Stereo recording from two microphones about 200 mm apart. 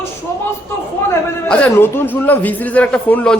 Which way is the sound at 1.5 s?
10° left (ahead or behind).